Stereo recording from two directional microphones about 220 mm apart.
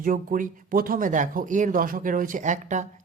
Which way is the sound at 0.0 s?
40° right (ahead or behind).